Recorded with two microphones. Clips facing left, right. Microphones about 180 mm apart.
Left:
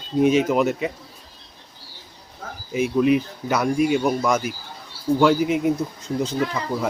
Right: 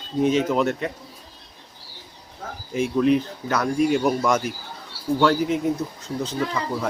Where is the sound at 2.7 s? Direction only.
5° left (ahead or behind).